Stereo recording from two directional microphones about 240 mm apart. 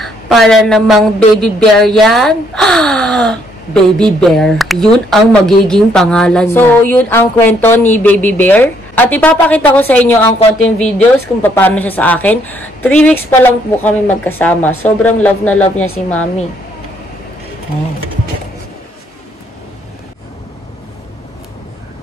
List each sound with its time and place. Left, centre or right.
0.0 s a woman's voice: centre
15.5 s speech: left